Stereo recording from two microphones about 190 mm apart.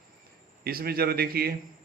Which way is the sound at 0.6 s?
55° right (ahead or behind).